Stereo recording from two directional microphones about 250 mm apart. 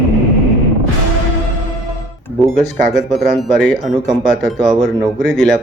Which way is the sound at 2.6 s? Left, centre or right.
Centre.